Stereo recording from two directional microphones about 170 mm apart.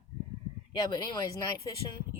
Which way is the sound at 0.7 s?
25° left (ahead or behind).